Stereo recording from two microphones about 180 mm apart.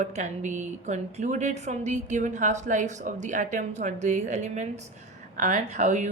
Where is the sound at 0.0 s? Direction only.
40° right (ahead or behind).